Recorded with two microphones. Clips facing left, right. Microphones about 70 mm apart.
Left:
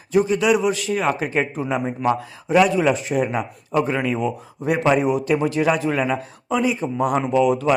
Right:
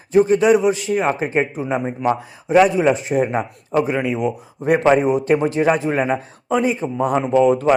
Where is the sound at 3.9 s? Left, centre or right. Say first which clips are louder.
Right 2 dB; centre.